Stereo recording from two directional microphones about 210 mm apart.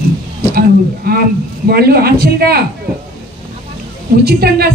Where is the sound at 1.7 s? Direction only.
45° right (ahead or behind).